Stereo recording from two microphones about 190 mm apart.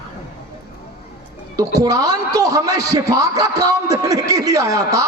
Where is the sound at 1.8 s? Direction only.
20° right (ahead or behind).